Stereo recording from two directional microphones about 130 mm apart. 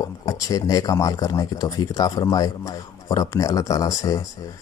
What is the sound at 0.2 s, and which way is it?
Speech, 25° left (ahead or behind).